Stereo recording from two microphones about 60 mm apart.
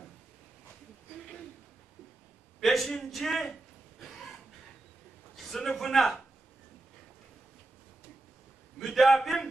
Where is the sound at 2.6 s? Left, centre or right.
Centre.